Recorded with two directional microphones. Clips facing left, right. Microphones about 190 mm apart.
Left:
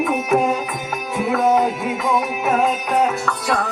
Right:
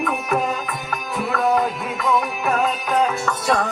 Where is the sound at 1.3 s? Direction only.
25° left (ahead or behind).